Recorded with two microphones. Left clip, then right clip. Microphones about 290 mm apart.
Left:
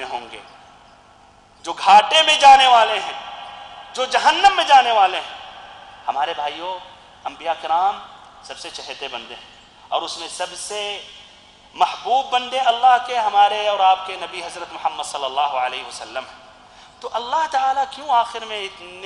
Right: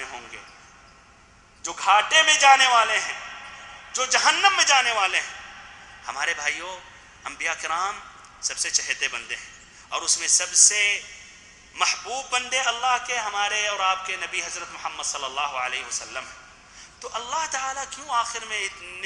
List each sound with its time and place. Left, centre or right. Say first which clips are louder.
0.0 s basketball bounce: left 8 dB; centre
1.6 s a man's voice: left 8 dB; centre